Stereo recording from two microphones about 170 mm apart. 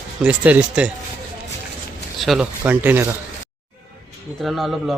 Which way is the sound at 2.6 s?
10° right (ahead or behind).